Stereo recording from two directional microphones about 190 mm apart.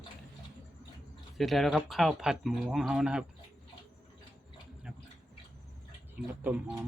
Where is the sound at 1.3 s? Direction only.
Centre (ahead or behind).